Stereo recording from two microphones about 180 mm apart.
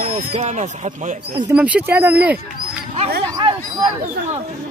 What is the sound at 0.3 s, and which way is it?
Speech, 40° right (ahead or behind).